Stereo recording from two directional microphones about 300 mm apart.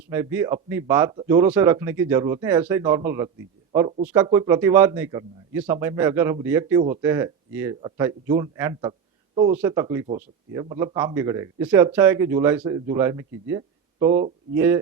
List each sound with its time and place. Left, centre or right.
0.1 s a man's voice: centre
4.0 s a man's voice: centre